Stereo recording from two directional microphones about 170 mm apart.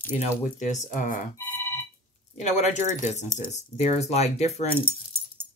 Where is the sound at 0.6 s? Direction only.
45° left (ahead or behind).